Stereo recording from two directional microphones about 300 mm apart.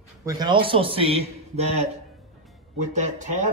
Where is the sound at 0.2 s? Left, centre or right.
Centre.